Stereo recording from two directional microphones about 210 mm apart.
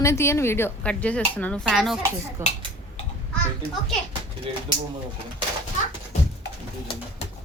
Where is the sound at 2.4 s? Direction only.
10° right (ahead or behind).